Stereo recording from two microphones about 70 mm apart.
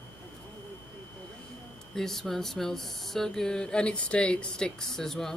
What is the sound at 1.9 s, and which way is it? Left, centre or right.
Speech, centre.